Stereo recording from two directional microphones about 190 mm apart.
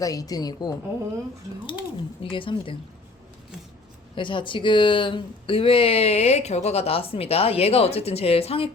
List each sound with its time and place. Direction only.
0.0 s a woman's voice: 20° left (ahead or behind)
2.3 s a woman's voice: 25° left (ahead or behind)
4.1 s speech: 25° left (ahead or behind)